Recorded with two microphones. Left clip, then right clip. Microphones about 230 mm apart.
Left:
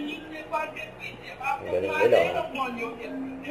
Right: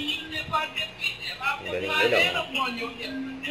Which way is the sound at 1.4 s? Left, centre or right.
Right.